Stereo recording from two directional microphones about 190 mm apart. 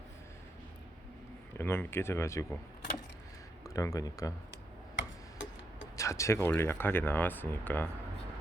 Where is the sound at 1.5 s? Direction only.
10° left (ahead or behind).